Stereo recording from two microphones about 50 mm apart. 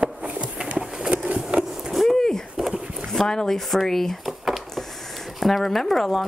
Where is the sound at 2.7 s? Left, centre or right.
Right.